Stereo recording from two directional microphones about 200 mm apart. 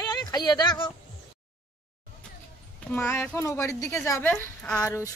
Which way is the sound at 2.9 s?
10° left (ahead or behind).